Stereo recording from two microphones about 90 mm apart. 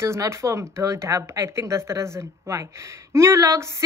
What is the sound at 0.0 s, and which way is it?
Speech, 30° right (ahead or behind).